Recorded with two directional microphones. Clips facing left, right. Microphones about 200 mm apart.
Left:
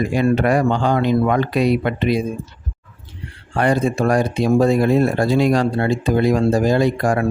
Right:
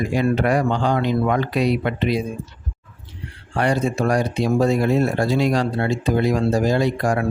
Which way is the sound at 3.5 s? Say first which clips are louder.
Left 3 dB; 50° left (ahead or behind).